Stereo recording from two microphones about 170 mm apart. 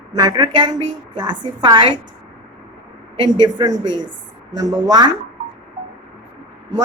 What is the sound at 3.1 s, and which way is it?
A woman's voice, 25° right (ahead or behind).